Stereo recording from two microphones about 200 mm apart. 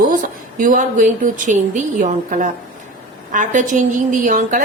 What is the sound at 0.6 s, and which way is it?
A woman's voice, 40° right (ahead or behind).